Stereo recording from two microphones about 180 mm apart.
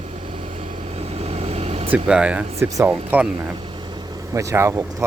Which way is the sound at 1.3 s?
35° right (ahead or behind).